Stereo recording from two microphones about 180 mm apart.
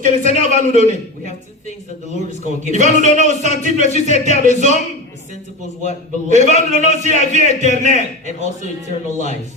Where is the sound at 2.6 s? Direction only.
45° right (ahead or behind).